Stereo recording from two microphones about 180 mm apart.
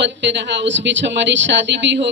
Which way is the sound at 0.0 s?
80° right.